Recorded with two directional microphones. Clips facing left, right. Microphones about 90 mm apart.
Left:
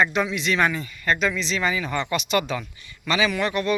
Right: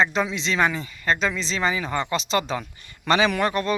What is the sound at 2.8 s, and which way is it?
Speech, 45° right (ahead or behind).